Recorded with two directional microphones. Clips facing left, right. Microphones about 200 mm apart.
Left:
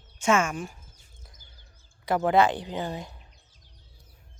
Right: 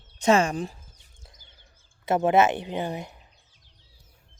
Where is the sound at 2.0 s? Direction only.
25° right (ahead or behind).